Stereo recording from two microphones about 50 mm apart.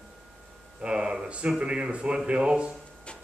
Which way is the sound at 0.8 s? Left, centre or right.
Right.